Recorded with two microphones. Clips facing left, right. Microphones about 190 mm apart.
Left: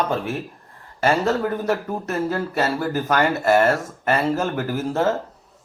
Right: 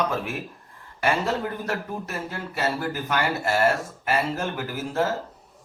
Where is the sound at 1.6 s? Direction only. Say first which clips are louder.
Left 6 dB; 45° left (ahead or behind).